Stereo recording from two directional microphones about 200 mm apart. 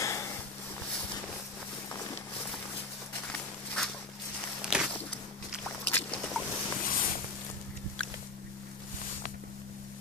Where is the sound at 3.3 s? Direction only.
5° left (ahead or behind).